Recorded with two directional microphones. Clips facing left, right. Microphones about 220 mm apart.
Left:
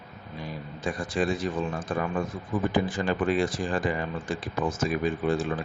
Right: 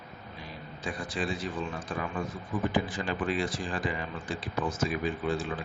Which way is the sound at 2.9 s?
50° left (ahead or behind).